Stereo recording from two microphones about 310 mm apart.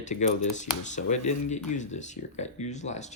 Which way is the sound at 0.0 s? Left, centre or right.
Left.